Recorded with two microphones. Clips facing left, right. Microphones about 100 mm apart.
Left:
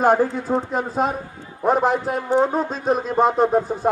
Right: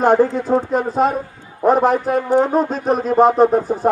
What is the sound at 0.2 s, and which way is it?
A man's voice, 50° right (ahead or behind).